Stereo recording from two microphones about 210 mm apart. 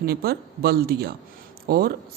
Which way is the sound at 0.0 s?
45° right (ahead or behind).